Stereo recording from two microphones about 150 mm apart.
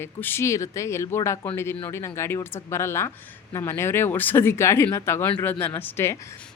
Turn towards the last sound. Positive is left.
turn(degrees=15)  # may be behind; listen again after turning